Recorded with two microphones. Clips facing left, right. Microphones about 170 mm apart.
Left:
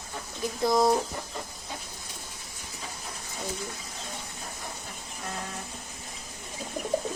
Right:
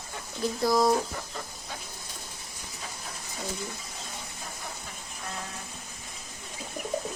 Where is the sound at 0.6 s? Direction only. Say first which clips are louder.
Left 1 dB; 25° left (ahead or behind).